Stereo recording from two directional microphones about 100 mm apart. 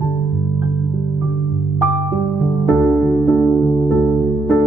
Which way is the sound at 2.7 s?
20° left (ahead or behind).